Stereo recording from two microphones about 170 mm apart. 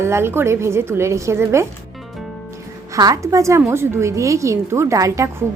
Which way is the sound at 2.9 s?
20° right (ahead or behind).